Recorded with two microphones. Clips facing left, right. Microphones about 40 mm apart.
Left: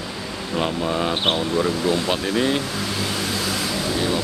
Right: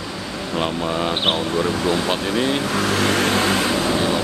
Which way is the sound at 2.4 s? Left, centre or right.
Centre.